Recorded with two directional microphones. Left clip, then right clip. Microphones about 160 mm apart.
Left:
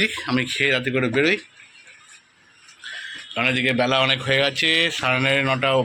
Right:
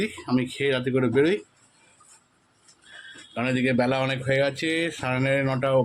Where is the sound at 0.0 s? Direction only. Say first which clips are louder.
Left 5 dB; 5° right (ahead or behind).